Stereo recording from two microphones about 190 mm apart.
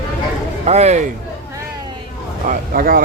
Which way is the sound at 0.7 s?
35° right (ahead or behind).